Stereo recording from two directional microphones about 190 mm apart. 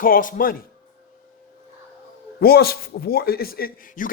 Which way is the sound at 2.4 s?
55° left (ahead or behind).